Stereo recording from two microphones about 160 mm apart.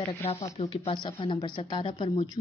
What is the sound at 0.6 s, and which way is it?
A woman's voice, 35° left (ahead or behind).